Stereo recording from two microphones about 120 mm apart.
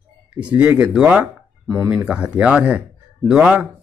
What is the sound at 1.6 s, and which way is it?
Speech, 25° right (ahead or behind).